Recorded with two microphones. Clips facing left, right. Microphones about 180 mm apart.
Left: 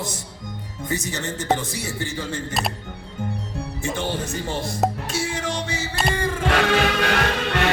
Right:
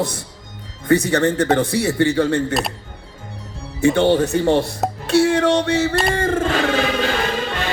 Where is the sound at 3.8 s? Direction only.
65° right (ahead or behind).